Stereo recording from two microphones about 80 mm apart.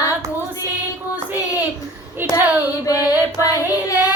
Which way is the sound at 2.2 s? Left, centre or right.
Right.